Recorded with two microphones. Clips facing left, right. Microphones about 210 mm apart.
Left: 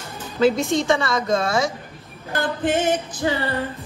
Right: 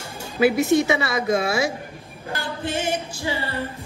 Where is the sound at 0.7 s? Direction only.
60° right (ahead or behind).